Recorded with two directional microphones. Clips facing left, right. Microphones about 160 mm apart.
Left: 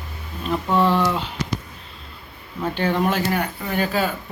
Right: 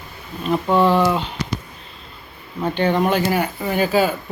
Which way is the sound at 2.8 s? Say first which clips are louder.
Right 3 dB; centre (ahead or behind).